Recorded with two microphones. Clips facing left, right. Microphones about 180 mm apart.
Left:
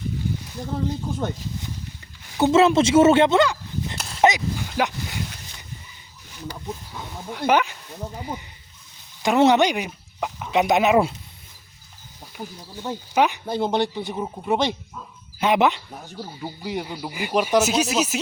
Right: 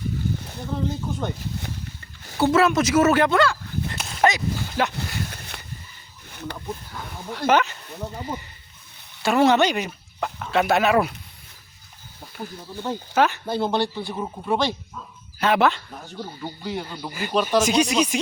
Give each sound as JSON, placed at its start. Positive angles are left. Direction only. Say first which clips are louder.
{"t": 2.4, "sound": "speech", "louder": "left 2 dB", "side_deg": 25}
{"t": 5.3, "sound": "a sound", "louder": "right 4 dB", "side_deg": -60}
{"t": 6.9, "sound": "speech", "louder": "even", "side_deg": 10}
{"t": 12.4, "sound": "speech", "louder": "right 2 dB", "side_deg": 15}